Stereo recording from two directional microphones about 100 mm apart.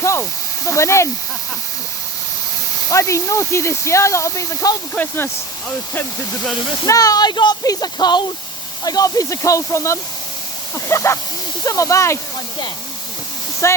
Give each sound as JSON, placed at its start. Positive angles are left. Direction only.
{"t": 0.0, "sound": "speech", "side_deg": 30}
{"t": 2.9, "sound": "speech", "side_deg": 30}
{"t": 4.9, "sound": "speech", "side_deg": 20}
{"t": 6.8, "sound": "speech", "side_deg": 35}
{"t": 13.6, "sound": "speech", "side_deg": 30}